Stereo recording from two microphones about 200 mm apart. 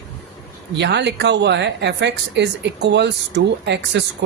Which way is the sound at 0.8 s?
60° right (ahead or behind).